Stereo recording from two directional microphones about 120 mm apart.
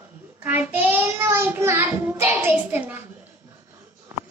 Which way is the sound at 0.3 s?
15° right (ahead or behind).